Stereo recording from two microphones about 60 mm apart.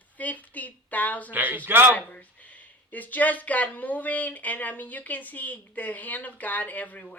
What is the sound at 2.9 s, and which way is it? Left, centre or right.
Speech, left.